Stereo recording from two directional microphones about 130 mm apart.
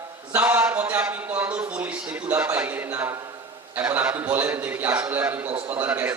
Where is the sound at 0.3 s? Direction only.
15° right (ahead or behind).